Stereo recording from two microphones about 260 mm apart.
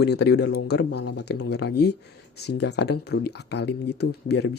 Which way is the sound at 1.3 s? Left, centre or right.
Left.